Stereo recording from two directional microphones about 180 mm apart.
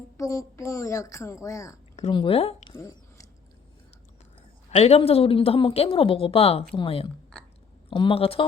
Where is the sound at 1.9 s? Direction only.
30° left (ahead or behind).